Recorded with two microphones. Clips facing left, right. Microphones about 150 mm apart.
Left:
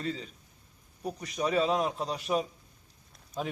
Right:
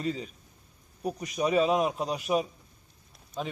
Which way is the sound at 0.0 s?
15° right (ahead or behind).